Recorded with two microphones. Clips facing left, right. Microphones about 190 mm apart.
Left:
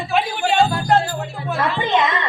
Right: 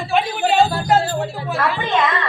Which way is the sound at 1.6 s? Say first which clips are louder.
Left 1 dB; 20° left (ahead or behind).